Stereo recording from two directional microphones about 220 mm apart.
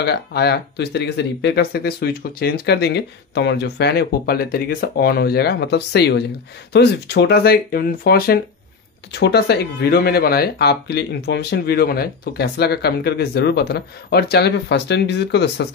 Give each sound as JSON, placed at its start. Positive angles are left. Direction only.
{"t": 0.0, "sound": "speech", "side_deg": 45}